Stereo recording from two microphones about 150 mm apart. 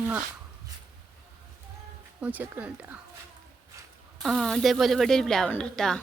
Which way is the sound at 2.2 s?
10° right (ahead or behind).